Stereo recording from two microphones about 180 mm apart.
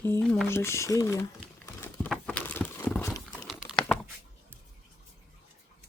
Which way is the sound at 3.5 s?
Centre (ahead or behind).